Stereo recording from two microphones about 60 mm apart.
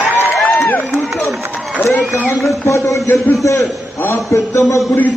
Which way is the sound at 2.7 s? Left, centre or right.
Left.